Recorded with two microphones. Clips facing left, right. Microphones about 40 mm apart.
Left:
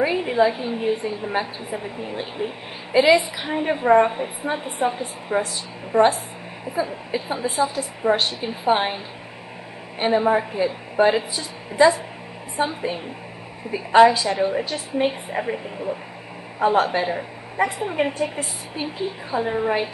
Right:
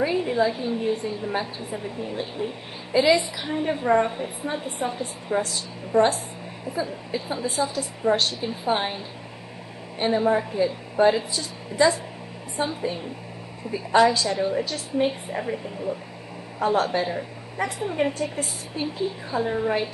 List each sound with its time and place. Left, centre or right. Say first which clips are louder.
0.0 s a woman's voice: left 3 dB; left